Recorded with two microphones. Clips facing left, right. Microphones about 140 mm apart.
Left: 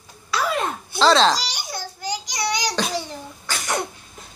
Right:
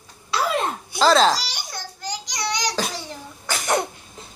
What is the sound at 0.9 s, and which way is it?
Babbling, 5° right (ahead or behind).